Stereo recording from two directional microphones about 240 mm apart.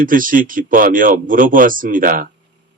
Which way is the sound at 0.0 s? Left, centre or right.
Right.